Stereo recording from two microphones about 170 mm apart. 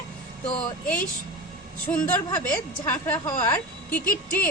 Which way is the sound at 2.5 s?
10° left (ahead or behind).